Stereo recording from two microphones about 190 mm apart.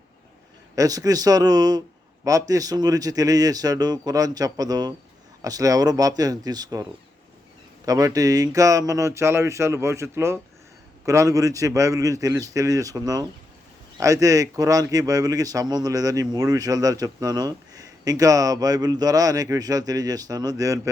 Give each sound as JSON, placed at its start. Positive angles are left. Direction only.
{"t": 0.8, "sound": "speech", "side_deg": -20}
{"t": 7.9, "sound": "speech", "side_deg": -20}